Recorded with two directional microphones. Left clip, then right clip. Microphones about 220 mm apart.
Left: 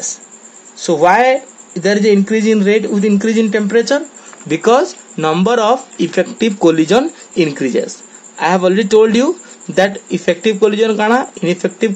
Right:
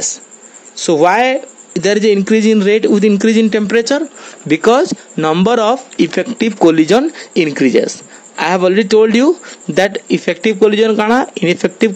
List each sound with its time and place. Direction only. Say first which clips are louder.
0.8 s speech: left 1 dB; 45° right (ahead or behind)